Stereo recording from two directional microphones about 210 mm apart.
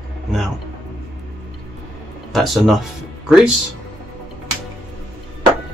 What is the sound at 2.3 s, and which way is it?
Speech, centre (ahead or behind).